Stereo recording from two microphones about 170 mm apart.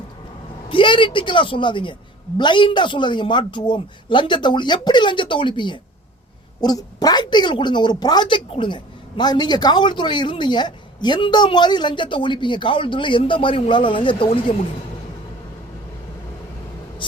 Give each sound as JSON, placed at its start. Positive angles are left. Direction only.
{"t": 0.7, "sound": "a woman's voice", "side_deg": 30}
{"t": 17.0, "sound": "speech", "side_deg": 30}